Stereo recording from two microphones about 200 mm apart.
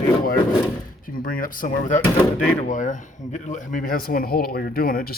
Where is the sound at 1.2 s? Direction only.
45° left (ahead or behind).